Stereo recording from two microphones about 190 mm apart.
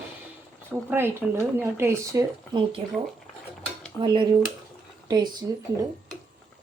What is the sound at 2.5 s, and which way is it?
Speech, 25° right (ahead or behind).